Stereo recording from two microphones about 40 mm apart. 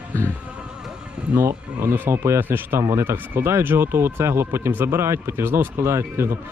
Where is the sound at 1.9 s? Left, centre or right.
Right.